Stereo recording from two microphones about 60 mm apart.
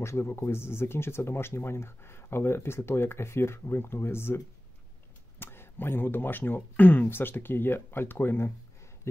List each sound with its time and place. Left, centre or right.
0.0 s speech: left
5.4 s speech: left
9.1 s a sound: left